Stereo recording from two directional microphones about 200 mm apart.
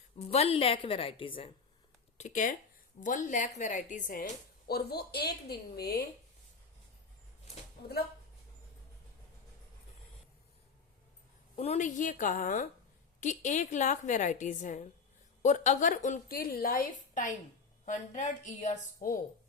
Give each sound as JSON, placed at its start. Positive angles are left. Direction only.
{"t": 0.2, "sound": "a woman's voice", "side_deg": 30}
{"t": 2.1, "sound": "a woman's voice", "side_deg": 40}
{"t": 11.5, "sound": "a woman's voice", "side_deg": 35}